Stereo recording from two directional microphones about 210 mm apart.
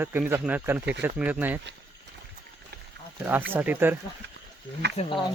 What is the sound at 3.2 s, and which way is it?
Speech, 10° right (ahead or behind).